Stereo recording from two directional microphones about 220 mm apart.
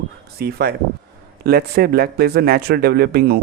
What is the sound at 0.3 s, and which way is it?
A man's voice, 45° right (ahead or behind).